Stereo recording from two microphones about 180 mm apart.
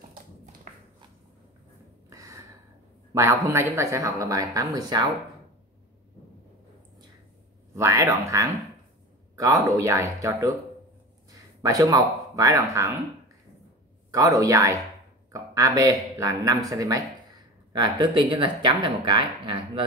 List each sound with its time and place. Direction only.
0.7 s a sound: 45° right (ahead or behind)
2.0 s gasp: 15° right (ahead or behind)
3.1 s speech: 15° right (ahead or behind)
7.7 s speech: 15° right (ahead or behind)
9.7 s speech: 15° right (ahead or behind)
11.6 s speech: 20° right (ahead or behind)
14.1 s speech: 20° right (ahead or behind)